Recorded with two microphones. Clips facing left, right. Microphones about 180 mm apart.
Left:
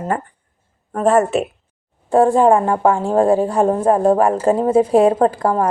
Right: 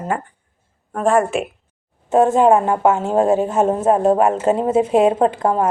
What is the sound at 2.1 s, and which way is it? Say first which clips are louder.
A woman's voice: left 1 dB; 20° right (ahead or behind).